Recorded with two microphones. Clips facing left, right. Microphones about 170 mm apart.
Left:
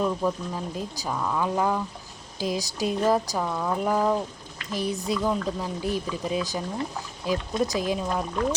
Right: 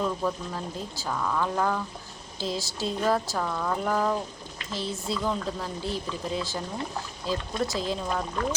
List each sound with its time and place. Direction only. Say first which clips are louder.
0.0 s speech: left 3 dB; 10° left (ahead or behind)